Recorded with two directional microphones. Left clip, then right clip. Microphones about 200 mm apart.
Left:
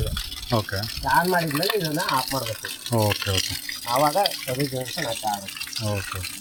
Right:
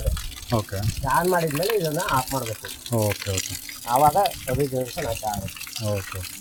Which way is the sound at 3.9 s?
35° right (ahead or behind).